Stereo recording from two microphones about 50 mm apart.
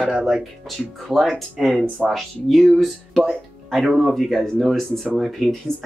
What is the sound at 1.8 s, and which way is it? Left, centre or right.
Speech, right.